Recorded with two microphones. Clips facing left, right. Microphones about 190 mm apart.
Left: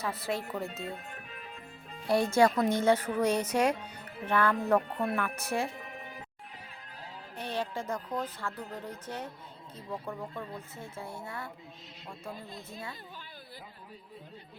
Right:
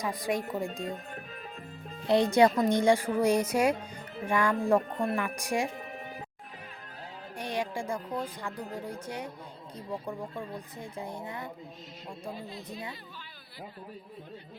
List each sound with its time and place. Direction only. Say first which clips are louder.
0.0 s speech: right 3 dB; 15° right (ahead or behind)
0.9 s speech: right 3 dB; 35° right (ahead or behind)
2.0 s speech: right 2 dB; 20° right (ahead or behind)
7.3 s speech: right 2 dB; 15° right (ahead or behind)
12.7 s speech: right 2 dB; 15° right (ahead or behind)